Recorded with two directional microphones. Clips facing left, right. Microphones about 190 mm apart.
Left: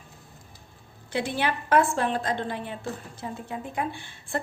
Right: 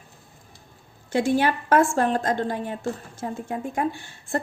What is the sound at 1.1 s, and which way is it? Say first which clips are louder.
A woman's voice: right 6 dB; 45° right (ahead or behind).